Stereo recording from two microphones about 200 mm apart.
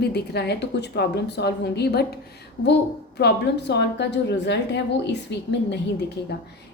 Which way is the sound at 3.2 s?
55° left (ahead or behind).